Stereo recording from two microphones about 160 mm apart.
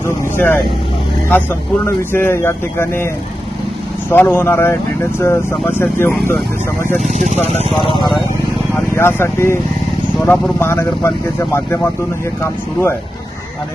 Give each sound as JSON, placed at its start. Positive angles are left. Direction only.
{"t": 0.3, "sound": "speech", "side_deg": 15}
{"t": 4.1, "sound": "speech", "side_deg": 15}
{"t": 7.1, "sound": "speech", "side_deg": -50}
{"t": 7.8, "sound": "speech", "side_deg": 30}
{"t": 8.7, "sound": "speech", "side_deg": 15}